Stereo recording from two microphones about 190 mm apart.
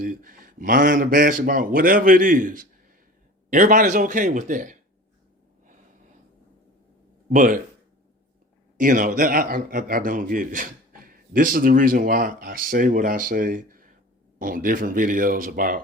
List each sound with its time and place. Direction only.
0.0 s a man's voice: 45° right (ahead or behind)
7.3 s a man's voice: 45° right (ahead or behind)
8.8 s a man's voice: 45° right (ahead or behind)